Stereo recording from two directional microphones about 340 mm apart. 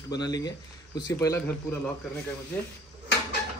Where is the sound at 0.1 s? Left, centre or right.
Centre.